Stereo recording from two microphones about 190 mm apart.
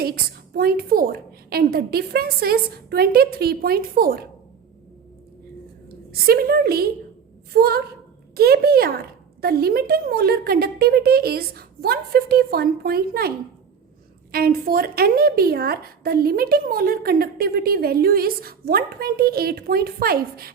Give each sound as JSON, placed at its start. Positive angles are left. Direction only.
{"t": 0.0, "sound": "a woman's voice", "side_deg": -55}
{"t": 6.1, "sound": "a woman's voice", "side_deg": -55}
{"t": 14.3, "sound": "a woman's voice", "side_deg": -50}